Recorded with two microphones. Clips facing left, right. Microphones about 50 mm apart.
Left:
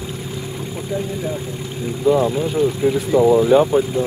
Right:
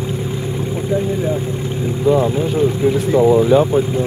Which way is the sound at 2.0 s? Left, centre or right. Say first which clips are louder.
Right 1 dB; centre.